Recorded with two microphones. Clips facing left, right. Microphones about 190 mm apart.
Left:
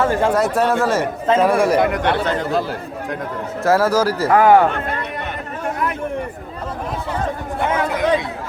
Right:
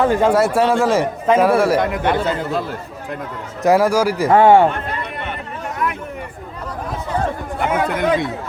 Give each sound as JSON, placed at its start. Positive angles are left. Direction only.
{"t": 0.0, "sound": "a man's voice", "side_deg": -15}
{"t": 3.6, "sound": "a man's voice", "side_deg": -15}
{"t": 4.3, "sound": "a man's voice", "side_deg": -25}